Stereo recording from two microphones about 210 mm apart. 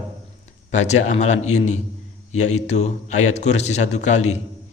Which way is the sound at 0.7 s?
35° left (ahead or behind).